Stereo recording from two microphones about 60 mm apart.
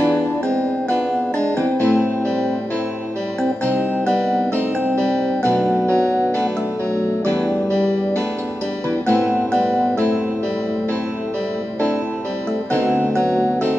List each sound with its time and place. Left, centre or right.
1.4 s music: right
4.0 s music: centre
9.3 s music: left
12.7 s music: right
13.1 s music: left